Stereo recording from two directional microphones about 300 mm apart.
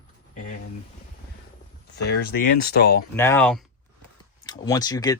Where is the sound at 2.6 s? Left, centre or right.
Left.